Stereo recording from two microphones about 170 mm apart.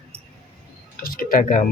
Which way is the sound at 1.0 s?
60° left (ahead or behind).